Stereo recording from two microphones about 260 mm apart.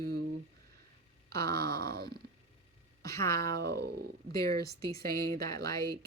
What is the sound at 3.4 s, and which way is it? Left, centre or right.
Speech, right.